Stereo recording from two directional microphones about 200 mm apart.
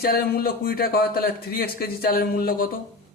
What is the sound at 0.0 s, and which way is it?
A man's voice, 50° left (ahead or behind).